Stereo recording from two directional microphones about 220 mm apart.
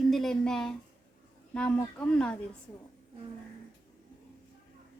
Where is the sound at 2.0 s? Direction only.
5° left (ahead or behind).